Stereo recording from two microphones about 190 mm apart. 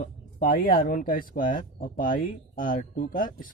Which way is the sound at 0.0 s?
45° left (ahead or behind).